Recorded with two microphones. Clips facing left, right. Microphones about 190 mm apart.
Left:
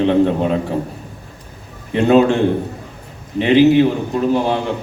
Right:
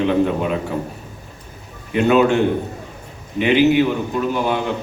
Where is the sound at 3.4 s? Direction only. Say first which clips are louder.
Left 4 dB; 30° left (ahead or behind).